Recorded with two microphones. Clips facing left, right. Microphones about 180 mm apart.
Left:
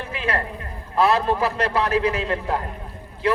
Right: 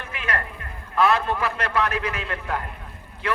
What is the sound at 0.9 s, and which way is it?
A man's voice, 35° left (ahead or behind).